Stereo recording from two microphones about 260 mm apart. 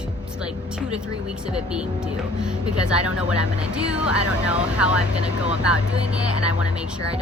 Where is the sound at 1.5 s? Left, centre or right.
Centre.